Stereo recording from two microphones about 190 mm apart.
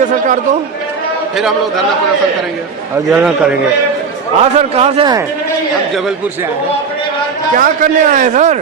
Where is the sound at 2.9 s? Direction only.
5° right (ahead or behind).